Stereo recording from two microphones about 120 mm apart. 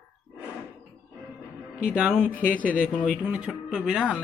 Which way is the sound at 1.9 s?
5° right (ahead or behind).